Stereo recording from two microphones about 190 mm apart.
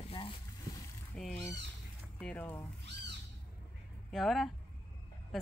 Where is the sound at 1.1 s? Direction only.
Centre (ahead or behind).